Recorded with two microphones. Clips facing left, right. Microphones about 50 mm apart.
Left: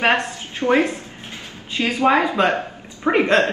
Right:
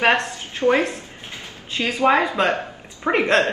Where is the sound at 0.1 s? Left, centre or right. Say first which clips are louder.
Even; left.